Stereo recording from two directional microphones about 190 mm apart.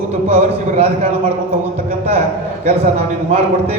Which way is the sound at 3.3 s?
35° right (ahead or behind).